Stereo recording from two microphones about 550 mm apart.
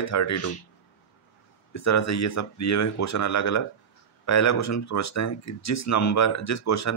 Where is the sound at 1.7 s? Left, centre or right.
Left.